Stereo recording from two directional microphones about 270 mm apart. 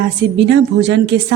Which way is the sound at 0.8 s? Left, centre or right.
Right.